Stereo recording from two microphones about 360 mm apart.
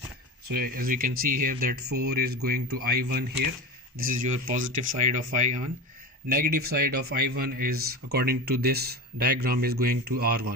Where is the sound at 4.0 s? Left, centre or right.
Right.